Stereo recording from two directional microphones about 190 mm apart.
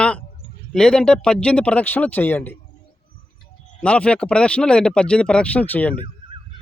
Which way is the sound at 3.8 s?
5° left (ahead or behind).